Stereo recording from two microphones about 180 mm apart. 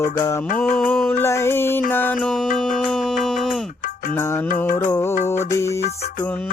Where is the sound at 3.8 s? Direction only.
50° left (ahead or behind).